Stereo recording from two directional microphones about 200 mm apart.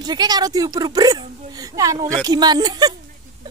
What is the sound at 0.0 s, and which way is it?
Speech, 20° right (ahead or behind).